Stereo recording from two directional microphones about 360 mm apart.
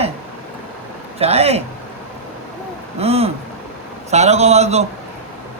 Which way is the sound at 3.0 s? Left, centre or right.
Centre.